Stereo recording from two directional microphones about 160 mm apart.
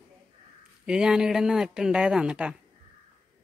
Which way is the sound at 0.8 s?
5° right (ahead or behind).